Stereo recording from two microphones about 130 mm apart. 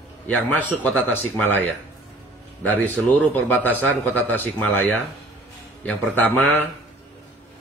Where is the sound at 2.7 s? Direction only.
15° left (ahead or behind).